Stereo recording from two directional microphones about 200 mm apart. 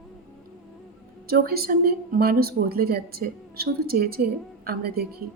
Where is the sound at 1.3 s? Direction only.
50° right (ahead or behind).